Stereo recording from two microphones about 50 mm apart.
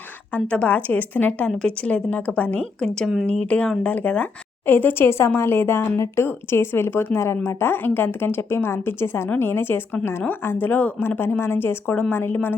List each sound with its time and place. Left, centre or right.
0.3 s a woman's voice: left
1.5 s a woman's voice: left
2.8 s speech: centre
3.2 s a woman's voice: left
4.6 s speech: left
11.2 s speech: left